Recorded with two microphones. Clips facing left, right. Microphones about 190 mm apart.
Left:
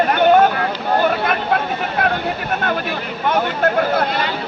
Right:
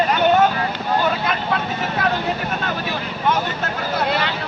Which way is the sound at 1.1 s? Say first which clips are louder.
Left 3 dB; 55° left (ahead or behind).